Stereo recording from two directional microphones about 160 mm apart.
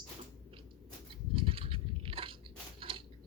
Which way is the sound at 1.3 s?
35° right (ahead or behind).